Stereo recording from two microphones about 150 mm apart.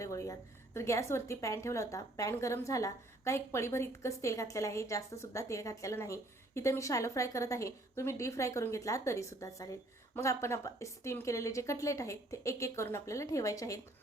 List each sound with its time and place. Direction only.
0.0 s a woman's voice: 20° left (ahead or behind)